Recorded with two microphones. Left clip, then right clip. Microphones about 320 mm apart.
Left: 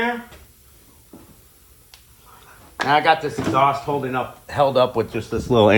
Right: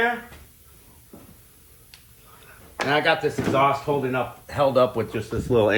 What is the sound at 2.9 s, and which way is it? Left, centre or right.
Speech, centre.